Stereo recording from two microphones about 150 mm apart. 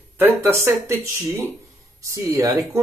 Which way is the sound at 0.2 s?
15° right (ahead or behind).